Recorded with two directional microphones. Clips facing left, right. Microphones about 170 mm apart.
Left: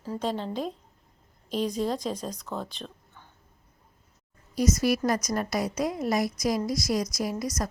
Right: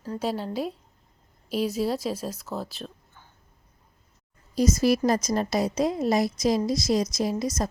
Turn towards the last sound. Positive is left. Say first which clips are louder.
# right 3 dB
turn(degrees=-25)  # may be behind; listen again after turning